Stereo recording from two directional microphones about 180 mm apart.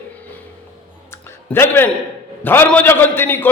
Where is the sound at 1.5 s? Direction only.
10° left (ahead or behind).